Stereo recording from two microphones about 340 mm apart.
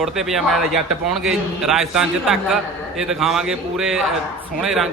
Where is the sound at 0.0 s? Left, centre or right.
Centre.